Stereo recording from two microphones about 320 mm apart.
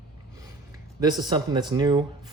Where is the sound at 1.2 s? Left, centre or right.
Centre.